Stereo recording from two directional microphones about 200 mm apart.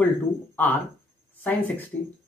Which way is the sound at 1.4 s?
10° left (ahead or behind).